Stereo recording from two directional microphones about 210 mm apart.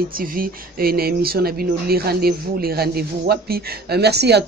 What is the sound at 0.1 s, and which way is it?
Speech, 45° right (ahead or behind).